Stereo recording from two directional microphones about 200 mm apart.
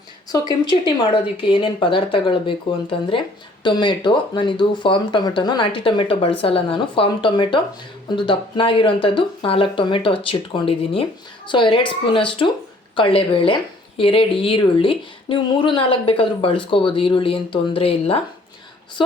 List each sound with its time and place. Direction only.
0.3 s speech: 20° left (ahead or behind)
3.6 s speech: 25° left (ahead or behind)